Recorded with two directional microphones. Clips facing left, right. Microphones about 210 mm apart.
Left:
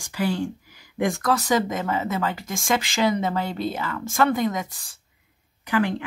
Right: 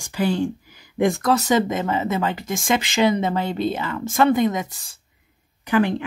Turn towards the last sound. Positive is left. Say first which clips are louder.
# right 4 dB
turn(degrees=-25)  # may be behind; listen again after turning